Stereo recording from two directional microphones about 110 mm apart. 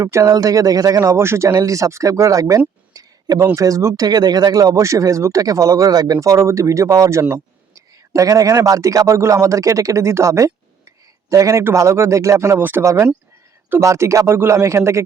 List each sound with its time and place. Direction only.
0.0 s speech: 25° right (ahead or behind)